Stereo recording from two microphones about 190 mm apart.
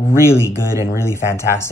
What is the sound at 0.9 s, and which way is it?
Speech, 15° left (ahead or behind).